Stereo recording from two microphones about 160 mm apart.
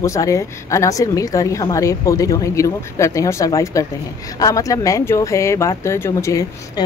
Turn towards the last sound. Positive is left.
turn(degrees=15)  # may be behind; listen again after turning